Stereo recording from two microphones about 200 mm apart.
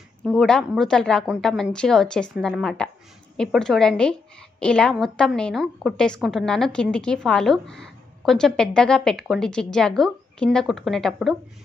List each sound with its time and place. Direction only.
0.2 s a woman's voice: centre (ahead or behind)